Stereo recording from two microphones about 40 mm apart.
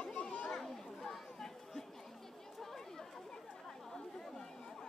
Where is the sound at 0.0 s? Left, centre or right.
Left.